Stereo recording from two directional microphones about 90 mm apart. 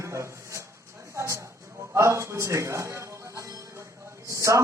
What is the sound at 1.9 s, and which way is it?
Music, 30° right (ahead or behind).